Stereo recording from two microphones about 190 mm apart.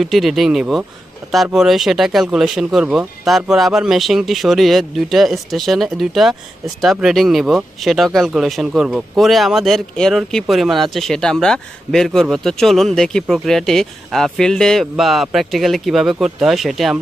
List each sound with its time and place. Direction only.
0.0 s speech: centre (ahead or behind)